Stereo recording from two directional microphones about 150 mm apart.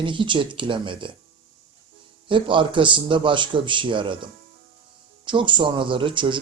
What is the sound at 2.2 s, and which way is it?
Speech, 35° right (ahead or behind).